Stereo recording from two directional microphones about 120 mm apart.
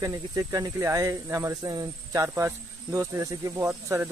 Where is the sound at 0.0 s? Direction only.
30° right (ahead or behind).